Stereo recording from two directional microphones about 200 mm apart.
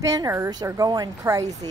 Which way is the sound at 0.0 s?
15° right (ahead or behind).